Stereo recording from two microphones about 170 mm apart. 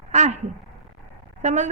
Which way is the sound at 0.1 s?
45° right (ahead or behind).